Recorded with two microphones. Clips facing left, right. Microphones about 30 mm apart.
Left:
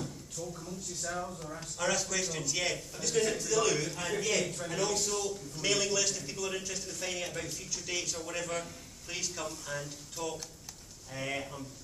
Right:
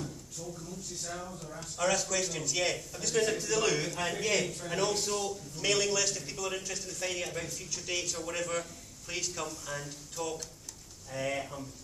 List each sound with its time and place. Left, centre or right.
0.5 s speech: left
1.8 s a man's voice: centre